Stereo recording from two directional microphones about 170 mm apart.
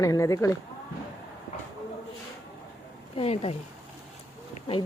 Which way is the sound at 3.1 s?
35° left (ahead or behind).